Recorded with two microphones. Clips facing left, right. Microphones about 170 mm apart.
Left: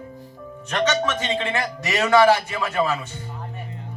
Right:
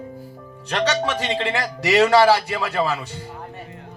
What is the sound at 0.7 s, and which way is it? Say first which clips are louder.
Speech: even; 35° right (ahead or behind).